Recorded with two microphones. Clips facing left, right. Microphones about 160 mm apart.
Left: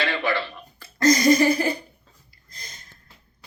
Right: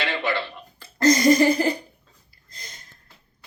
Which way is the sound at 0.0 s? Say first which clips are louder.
Left 1 dB; 20° right (ahead or behind).